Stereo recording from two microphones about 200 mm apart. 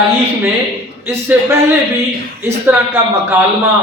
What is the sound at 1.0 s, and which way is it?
Speech, 10° right (ahead or behind).